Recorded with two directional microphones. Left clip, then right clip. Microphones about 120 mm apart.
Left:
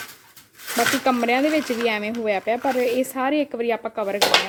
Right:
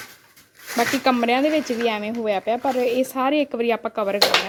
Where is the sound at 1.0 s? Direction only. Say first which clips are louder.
Right 1 dB; 20° right (ahead or behind).